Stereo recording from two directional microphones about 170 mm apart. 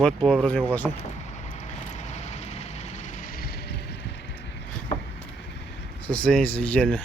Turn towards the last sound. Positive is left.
turn(degrees=5)  # may be behind; listen again after turning